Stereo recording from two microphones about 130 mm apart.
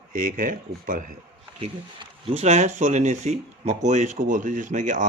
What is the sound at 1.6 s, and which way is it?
Speech, 50° right (ahead or behind).